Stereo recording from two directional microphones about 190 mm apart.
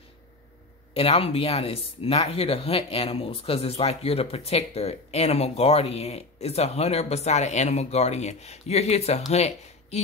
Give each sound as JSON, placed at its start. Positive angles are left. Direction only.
{"t": 0.9, "sound": "speech", "side_deg": 30}